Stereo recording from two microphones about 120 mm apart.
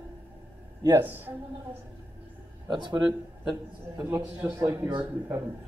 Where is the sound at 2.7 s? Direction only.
40° right (ahead or behind).